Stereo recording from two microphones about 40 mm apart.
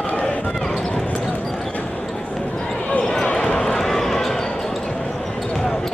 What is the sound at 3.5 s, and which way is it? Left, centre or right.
Run, centre.